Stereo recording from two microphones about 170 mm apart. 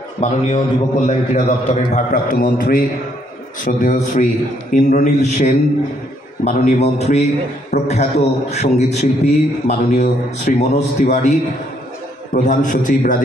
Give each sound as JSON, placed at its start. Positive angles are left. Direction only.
{"t": 0.2, "sound": "a man's voice", "side_deg": 40}
{"t": 2.2, "sound": "a man's voice", "side_deg": 55}